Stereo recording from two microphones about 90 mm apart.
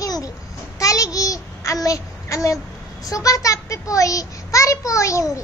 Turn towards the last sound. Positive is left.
turn(degrees=35)  # may be behind; listen again after turning